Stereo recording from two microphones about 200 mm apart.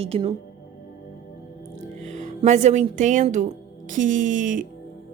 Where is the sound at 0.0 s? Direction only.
25° right (ahead or behind).